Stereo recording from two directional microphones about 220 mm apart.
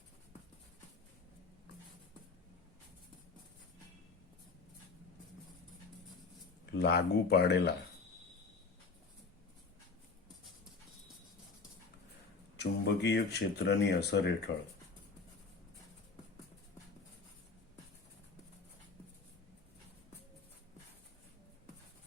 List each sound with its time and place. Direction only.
6.7 s speech: 50° left (ahead or behind)
12.5 s speech: 50° left (ahead or behind)